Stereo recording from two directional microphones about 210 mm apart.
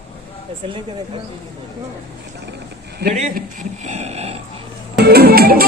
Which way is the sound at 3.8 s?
30° right (ahead or behind).